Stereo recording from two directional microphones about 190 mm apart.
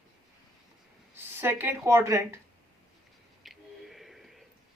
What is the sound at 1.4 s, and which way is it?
Speech, 10° right (ahead or behind).